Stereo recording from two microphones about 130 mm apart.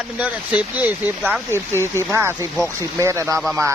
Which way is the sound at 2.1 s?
20° right (ahead or behind).